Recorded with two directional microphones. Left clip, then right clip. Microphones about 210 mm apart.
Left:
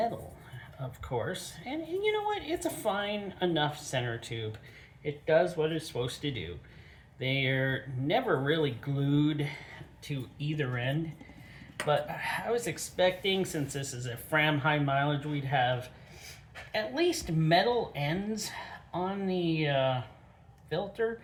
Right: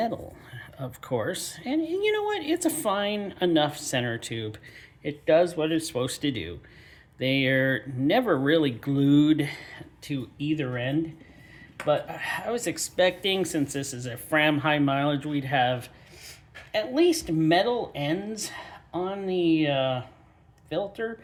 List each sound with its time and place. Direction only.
0.6 s speech: 45° right (ahead or behind)